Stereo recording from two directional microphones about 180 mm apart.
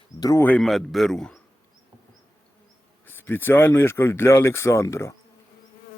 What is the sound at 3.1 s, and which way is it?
Speech, 10° left (ahead or behind).